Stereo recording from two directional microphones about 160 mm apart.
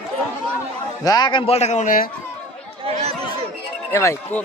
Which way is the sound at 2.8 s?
40° right (ahead or behind).